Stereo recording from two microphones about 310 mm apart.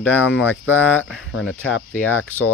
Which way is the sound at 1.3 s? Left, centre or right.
Left.